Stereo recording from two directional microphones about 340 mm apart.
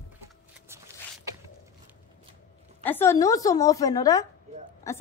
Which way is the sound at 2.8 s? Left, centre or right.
Centre.